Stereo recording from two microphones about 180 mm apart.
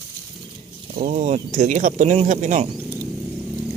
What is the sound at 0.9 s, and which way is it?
Speech, 45° right (ahead or behind).